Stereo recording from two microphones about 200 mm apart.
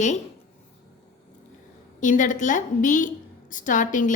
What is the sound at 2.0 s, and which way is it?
A woman's voice, 40° left (ahead or behind).